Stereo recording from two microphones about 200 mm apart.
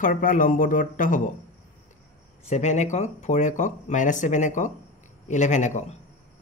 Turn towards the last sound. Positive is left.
turn(degrees=35)  # may be behind; listen again after turning